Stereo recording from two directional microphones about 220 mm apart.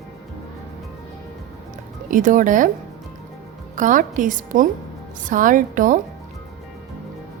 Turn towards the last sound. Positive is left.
turn(degrees=-35)  # may be behind; listen again after turning